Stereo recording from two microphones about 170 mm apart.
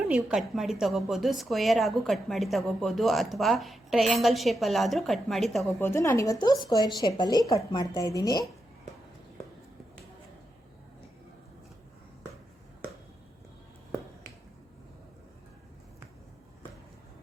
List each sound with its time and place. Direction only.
0.1 s a woman's voice: 5° right (ahead or behind)
5.8 s a woman's voice: 15° left (ahead or behind)